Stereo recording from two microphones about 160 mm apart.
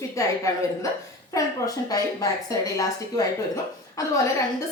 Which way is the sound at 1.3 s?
20° left (ahead or behind).